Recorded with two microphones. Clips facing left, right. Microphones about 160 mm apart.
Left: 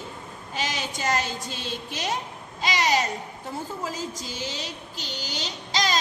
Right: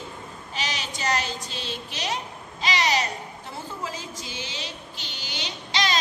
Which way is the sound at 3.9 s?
45° left (ahead or behind).